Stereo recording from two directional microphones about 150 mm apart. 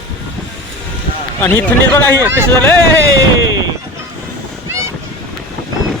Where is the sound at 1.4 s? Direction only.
15° left (ahead or behind).